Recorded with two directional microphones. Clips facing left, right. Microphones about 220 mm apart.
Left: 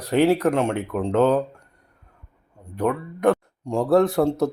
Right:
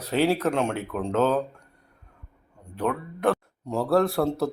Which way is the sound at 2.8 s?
10° left (ahead or behind).